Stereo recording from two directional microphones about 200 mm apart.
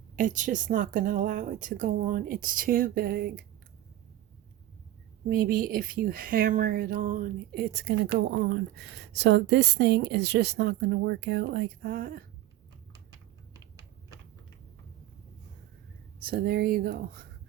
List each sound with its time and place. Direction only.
0.2 s speech: 40° right (ahead or behind)
5.3 s speech: 45° right (ahead or behind)
16.2 s speech: 50° right (ahead or behind)